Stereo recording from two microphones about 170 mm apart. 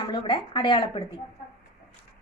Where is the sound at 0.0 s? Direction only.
30° left (ahead or behind).